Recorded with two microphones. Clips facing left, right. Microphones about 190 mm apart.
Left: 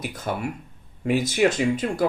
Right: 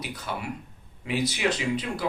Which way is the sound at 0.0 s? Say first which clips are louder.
Left 6 dB; 50° left (ahead or behind).